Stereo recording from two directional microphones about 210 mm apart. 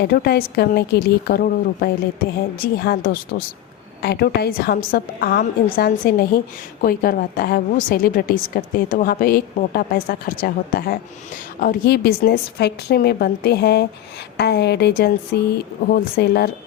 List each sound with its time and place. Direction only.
0.0 s a woman's voice: 50° left (ahead or behind)